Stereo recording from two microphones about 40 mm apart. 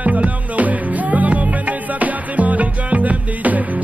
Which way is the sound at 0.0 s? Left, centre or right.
Right.